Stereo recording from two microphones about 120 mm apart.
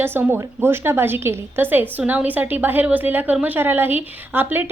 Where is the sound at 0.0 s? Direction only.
20° right (ahead or behind).